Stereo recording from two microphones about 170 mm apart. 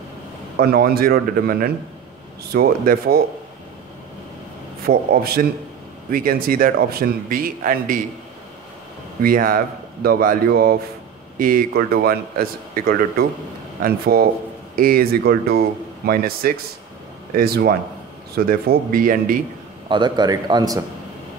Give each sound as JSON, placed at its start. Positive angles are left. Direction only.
{"t": 0.6, "sound": "a man's voice", "side_deg": -65}
{"t": 4.8, "sound": "a man's voice", "side_deg": -60}
{"t": 9.2, "sound": "a man's voice", "side_deg": -55}
{"t": 19.9, "sound": "a man's voice", "side_deg": -25}